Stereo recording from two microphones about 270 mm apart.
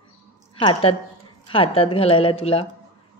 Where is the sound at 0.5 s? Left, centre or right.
Centre.